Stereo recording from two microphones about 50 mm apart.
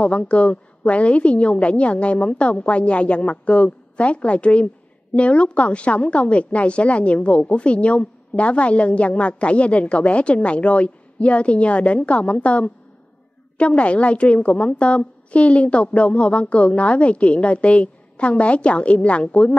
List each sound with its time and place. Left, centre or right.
0.0 s a woman's voice: left